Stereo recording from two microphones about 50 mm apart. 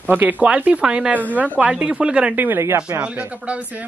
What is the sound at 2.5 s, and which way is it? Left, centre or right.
Speech, right.